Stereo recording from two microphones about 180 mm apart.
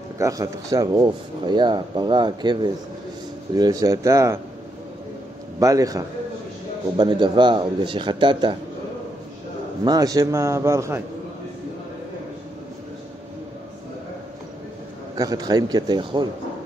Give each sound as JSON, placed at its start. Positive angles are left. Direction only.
{"t": 0.2, "sound": "speech", "side_deg": -20}
{"t": 5.6, "sound": "speech", "side_deg": -20}
{"t": 9.8, "sound": "a man's voice", "side_deg": -20}
{"t": 15.1, "sound": "speech", "side_deg": -20}